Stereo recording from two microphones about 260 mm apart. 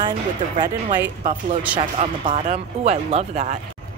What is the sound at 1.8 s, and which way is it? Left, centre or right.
Speech, right.